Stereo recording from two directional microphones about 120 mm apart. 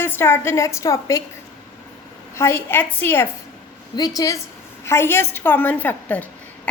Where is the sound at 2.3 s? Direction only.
20° left (ahead or behind).